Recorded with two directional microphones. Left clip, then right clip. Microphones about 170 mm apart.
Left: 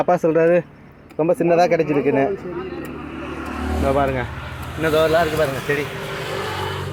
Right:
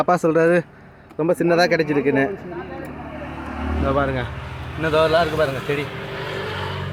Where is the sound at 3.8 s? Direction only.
5° right (ahead or behind).